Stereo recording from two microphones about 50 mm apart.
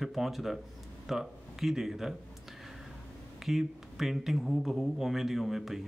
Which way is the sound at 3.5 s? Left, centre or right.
Centre.